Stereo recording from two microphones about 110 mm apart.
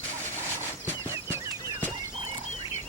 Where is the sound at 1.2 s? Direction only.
20° right (ahead or behind).